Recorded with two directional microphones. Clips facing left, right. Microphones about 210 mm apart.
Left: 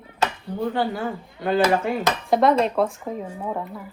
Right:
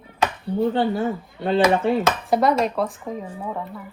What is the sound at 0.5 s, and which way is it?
Speech, 25° right (ahead or behind).